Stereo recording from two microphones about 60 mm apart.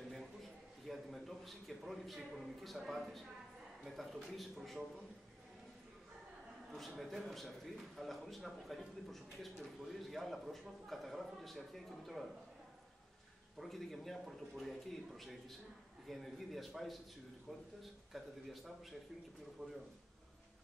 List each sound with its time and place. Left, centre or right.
0.8 s a sound: centre
2.9 s a man's voice: centre
7.0 s a man's voice: centre
13.6 s a man's voice: centre
19.6 s a man's voice: right